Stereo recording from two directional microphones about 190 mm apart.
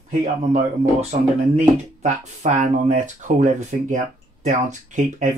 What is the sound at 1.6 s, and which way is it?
Speech, 35° right (ahead or behind).